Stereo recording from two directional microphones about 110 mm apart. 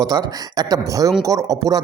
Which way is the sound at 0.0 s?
35° right (ahead or behind).